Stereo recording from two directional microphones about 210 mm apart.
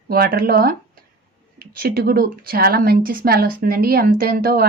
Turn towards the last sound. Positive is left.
turn(degrees=-45)  # may be behind; listen again after turning